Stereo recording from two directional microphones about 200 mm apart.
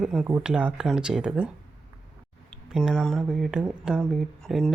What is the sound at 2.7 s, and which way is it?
Speech, centre (ahead or behind).